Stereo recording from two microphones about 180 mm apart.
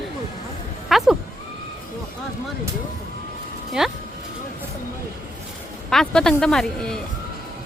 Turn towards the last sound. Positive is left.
turn(degrees=5)  # may be behind; listen again after turning